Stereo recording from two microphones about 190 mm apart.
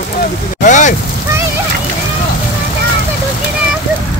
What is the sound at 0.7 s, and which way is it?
Speech, 40° left (ahead or behind).